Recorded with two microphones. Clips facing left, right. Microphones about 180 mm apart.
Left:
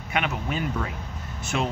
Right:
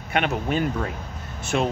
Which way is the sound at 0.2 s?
35° right (ahead or behind).